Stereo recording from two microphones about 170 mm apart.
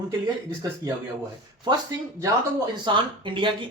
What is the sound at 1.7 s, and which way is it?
Speech, 25° right (ahead or behind).